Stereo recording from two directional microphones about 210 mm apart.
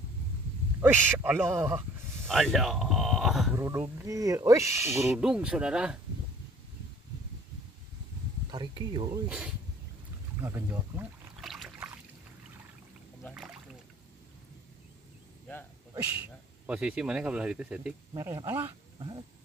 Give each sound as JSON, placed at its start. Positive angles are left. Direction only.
{"t": 0.7, "sound": "speech", "side_deg": -10}
{"t": 2.2, "sound": "speech", "side_deg": 0}
{"t": 3.5, "sound": "speech", "side_deg": -15}
{"t": 8.5, "sound": "speech", "side_deg": -20}
{"t": 10.4, "sound": "boat", "side_deg": -10}
{"t": 13.3, "sound": "rowboat", "side_deg": -5}
{"t": 16.6, "sound": "speech", "side_deg": -5}
{"t": 18.9, "sound": "dog", "side_deg": -20}